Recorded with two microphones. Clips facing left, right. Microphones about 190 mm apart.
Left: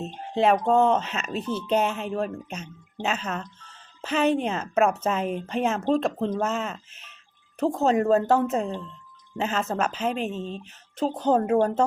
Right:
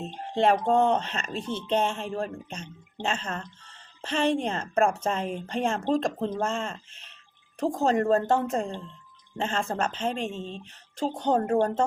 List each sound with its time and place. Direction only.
0.0 s a woman's voice: 5° left (ahead or behind)
1.5 s speech: 30° right (ahead or behind)
1.7 s a woman's voice: 5° left (ahead or behind)